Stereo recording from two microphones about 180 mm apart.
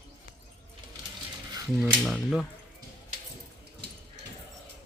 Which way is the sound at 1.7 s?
Centre (ahead or behind).